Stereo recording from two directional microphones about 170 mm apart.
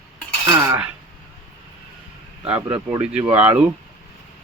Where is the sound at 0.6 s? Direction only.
15° right (ahead or behind).